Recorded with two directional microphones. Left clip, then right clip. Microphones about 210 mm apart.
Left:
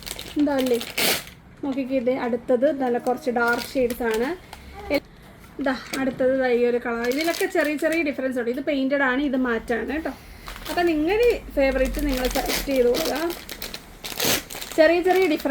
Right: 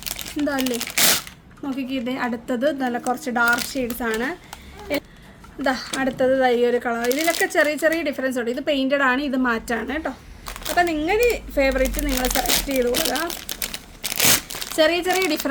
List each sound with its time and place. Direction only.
0.0 s speech: 50° right (ahead or behind)
2.0 s speech: 55° right (ahead or behind)
5.6 s speech: 60° right (ahead or behind)